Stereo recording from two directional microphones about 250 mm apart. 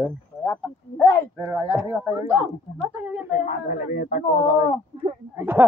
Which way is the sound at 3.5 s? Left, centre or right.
Left.